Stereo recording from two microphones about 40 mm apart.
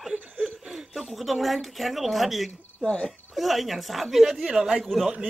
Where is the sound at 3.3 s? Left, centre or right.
Centre.